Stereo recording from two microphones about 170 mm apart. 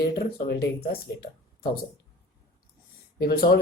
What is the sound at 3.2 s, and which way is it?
Speech, 65° left (ahead or behind).